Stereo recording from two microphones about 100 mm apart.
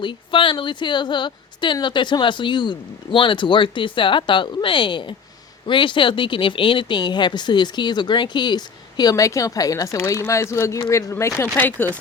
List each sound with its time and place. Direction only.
0.0 s speech: 55° left (ahead or behind); by 11.9 s 20° left (ahead or behind)